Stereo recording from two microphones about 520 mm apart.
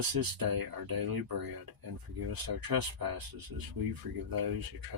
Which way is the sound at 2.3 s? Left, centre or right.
Right.